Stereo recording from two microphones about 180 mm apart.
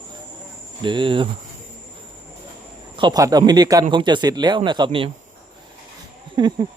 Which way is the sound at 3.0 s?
25° right (ahead or behind).